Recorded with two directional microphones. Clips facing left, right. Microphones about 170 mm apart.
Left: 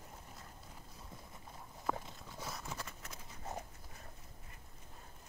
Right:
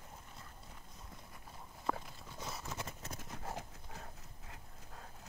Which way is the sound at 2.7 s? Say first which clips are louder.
Right 3 dB; 25° right (ahead or behind).